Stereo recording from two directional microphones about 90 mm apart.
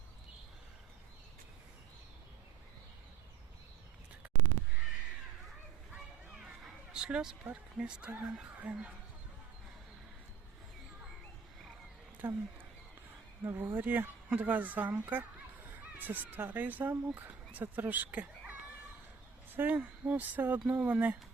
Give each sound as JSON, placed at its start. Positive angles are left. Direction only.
{"t": 6.9, "sound": "speech", "side_deg": -10}
{"t": 12.2, "sound": "speech", "side_deg": -25}
{"t": 13.4, "sound": "speech", "side_deg": -25}
{"t": 19.5, "sound": "speech", "side_deg": -20}